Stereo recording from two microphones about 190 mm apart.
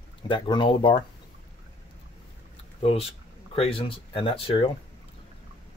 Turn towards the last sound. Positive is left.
turn(degrees=30)  # may be behind; listen again after turning